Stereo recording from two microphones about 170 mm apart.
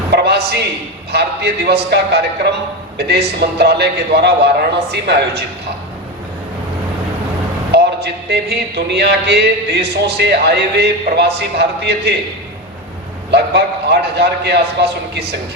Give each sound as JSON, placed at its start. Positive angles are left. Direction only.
{"t": 0.1, "sound": "a sound", "side_deg": -75}
{"t": 1.1, "sound": "speech", "side_deg": -75}
{"t": 7.7, "sound": "speech", "side_deg": -75}
{"t": 13.3, "sound": "speech", "side_deg": -75}